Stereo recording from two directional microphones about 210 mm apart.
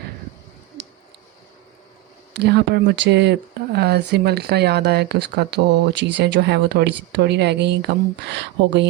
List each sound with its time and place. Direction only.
2.3 s speech: 50° right (ahead or behind)